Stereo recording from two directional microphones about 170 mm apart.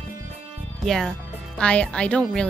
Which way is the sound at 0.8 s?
5° left (ahead or behind).